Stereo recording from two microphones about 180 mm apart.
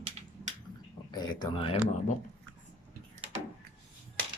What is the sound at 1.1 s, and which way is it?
Speech, 25° left (ahead or behind).